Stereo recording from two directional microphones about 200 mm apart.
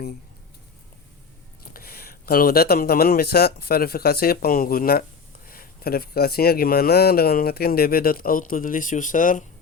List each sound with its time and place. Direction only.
1.7 s speech: 50° left (ahead or behind)